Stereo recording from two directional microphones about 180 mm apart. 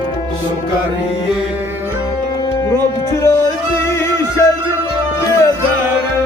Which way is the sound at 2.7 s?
15° left (ahead or behind).